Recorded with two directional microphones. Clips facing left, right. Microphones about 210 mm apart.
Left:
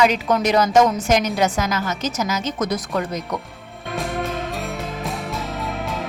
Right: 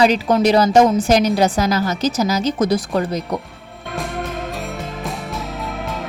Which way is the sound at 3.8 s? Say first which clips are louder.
Left 1 dB; centre (ahead or behind).